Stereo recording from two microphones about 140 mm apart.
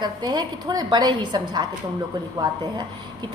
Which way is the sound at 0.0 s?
30° right (ahead or behind).